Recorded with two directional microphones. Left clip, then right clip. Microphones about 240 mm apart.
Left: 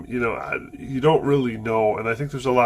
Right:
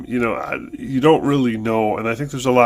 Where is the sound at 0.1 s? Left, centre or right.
Right.